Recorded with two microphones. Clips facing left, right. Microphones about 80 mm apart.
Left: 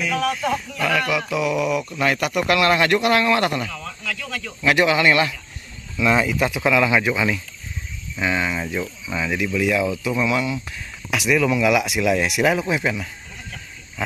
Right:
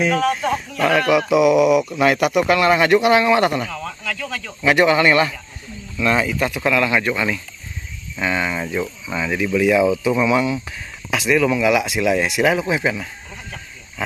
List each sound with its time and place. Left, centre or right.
0.0 s speech: right
0.3 s speech: right; by 9.5 s centre
9.7 s speech: centre